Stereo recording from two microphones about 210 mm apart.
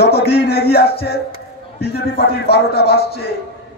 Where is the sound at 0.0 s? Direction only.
50° left (ahead or behind).